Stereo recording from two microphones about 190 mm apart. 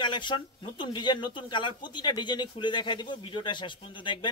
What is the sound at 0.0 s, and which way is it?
Speech, 25° left (ahead or behind).